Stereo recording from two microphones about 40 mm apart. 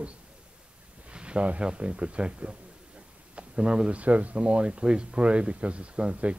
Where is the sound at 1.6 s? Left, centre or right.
Right.